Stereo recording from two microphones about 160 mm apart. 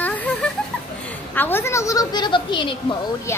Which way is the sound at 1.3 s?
15° left (ahead or behind).